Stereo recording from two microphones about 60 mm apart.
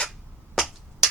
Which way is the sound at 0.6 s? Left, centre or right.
Centre.